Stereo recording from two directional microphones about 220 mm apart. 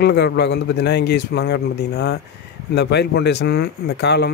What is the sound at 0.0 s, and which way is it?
A man's voice, 50° left (ahead or behind).